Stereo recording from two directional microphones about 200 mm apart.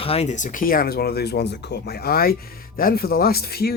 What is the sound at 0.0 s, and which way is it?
Speech, 30° left (ahead or behind).